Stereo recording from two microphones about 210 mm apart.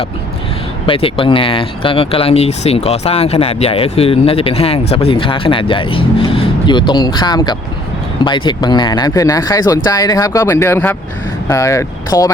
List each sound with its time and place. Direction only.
0.9 s speech: 25° left (ahead or behind)